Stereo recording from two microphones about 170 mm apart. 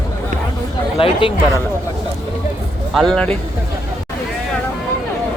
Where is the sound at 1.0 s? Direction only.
30° left (ahead or behind).